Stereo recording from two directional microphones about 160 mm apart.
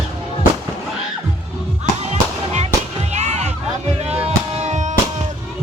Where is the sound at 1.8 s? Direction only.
45° right (ahead or behind).